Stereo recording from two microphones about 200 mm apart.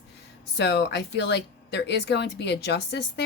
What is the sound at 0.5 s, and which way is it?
Speech, 60° left (ahead or behind).